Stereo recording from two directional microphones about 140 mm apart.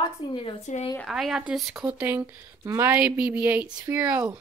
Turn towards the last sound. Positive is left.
turn(degrees=-10)  # may be behind; listen again after turning